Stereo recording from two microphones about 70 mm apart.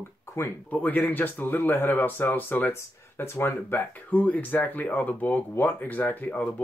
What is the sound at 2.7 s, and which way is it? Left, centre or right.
Speech, left.